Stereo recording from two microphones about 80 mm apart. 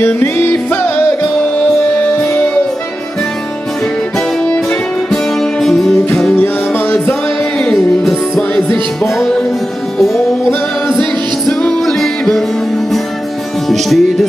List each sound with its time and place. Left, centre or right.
0.0 s music: left
5.1 s music: centre
6.3 s music: left
7.5 s music: centre
9.9 s music: centre
13.7 s music: centre